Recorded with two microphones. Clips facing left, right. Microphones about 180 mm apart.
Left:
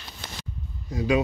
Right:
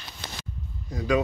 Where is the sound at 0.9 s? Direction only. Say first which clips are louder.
Left 1 dB; 25° left (ahead or behind).